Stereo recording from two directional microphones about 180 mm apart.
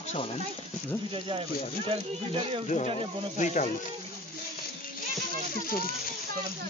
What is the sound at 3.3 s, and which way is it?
Speech, 45° left (ahead or behind).